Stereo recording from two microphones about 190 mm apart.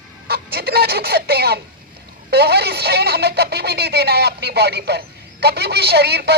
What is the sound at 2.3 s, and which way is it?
Speech, 55° right (ahead or behind).